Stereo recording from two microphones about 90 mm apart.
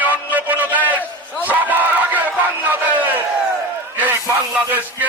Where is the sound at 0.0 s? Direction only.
20° right (ahead or behind).